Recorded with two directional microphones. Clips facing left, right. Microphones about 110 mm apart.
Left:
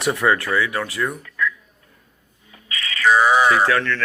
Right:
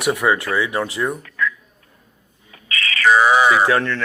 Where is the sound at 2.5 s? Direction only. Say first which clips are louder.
Right 5 dB; 80° right.